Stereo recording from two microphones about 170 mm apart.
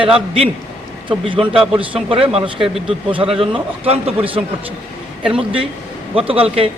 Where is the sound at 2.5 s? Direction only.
Centre (ahead or behind).